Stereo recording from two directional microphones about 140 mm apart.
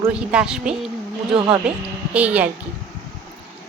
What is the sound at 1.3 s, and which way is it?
Speech, 40° right (ahead or behind).